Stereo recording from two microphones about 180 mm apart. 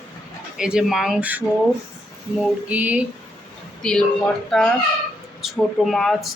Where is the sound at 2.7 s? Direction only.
10° right (ahead or behind).